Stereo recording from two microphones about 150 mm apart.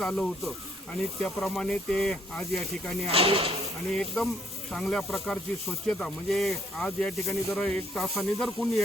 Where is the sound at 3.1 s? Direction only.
40° right (ahead or behind).